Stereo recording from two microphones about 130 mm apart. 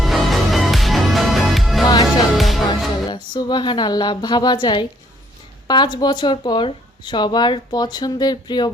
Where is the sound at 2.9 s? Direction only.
35° left (ahead or behind).